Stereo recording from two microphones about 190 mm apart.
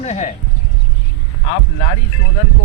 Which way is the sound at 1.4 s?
40° left (ahead or behind).